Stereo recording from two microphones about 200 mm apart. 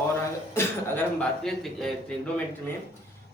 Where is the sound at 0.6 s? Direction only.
10° left (ahead or behind).